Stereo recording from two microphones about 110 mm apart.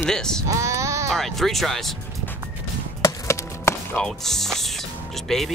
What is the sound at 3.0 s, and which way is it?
Chop, 25° left (ahead or behind).